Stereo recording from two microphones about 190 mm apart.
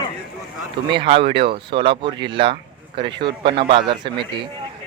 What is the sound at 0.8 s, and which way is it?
Speech, 25° right (ahead or behind).